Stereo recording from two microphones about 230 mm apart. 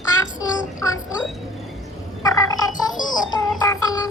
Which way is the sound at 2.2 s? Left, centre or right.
Centre.